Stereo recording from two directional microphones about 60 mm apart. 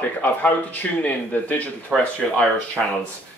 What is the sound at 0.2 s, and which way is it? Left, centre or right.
Speech, left.